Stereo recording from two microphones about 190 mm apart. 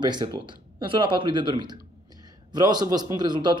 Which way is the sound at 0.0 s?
25° right (ahead or behind).